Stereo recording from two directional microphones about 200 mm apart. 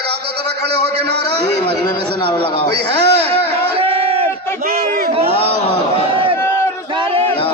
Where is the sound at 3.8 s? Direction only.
30° right (ahead or behind).